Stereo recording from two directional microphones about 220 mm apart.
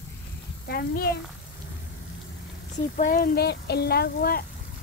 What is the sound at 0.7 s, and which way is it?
Speech, 45° left (ahead or behind).